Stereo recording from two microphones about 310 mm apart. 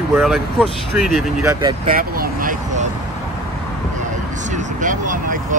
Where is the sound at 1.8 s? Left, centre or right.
Right.